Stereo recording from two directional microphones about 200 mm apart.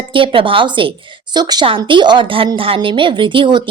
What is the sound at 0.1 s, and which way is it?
A woman's voice, 25° right (ahead or behind).